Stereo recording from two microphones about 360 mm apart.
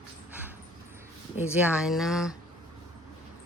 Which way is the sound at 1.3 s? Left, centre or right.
Centre.